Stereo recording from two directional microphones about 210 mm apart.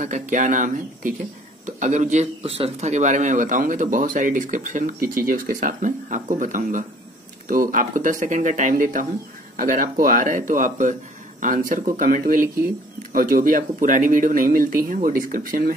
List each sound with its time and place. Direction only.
0.0 s a man's voice: 35° right (ahead or behind)